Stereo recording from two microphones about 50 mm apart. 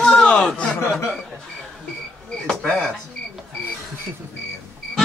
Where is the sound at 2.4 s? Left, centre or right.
Centre.